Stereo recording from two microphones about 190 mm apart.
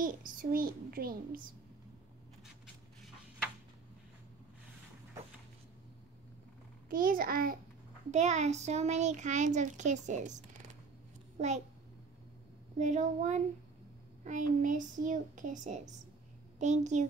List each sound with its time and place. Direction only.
0.0 s a child's voice: 45° right (ahead or behind)
6.9 s a child's voice: 45° right (ahead or behind)
8.1 s a child's voice: 35° right (ahead or behind)
12.7 s a child's voice: 40° right (ahead or behind)